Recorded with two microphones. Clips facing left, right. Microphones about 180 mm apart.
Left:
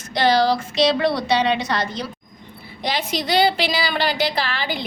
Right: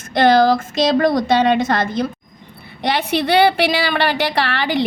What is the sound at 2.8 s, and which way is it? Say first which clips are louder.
A woman's voice: right 6 dB; 65° right (ahead or behind).